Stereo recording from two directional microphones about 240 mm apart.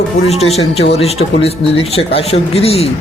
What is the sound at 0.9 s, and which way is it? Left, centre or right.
Speech, left.